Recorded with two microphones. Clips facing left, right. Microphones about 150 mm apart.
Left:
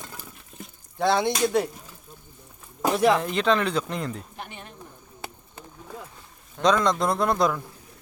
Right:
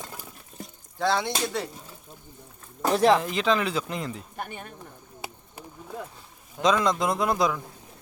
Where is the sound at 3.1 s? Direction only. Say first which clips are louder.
Left 1 dB; centre (ahead or behind).